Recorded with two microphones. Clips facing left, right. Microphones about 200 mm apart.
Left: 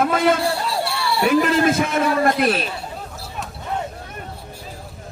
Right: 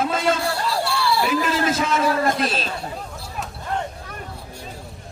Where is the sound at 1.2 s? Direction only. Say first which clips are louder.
Left 5 dB; 55° left (ahead or behind).